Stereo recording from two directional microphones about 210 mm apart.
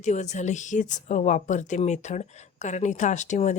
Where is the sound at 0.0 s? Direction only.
35° left (ahead or behind).